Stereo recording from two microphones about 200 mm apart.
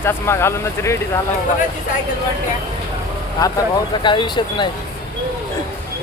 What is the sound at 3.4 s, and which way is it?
Speech, 20° left (ahead or behind).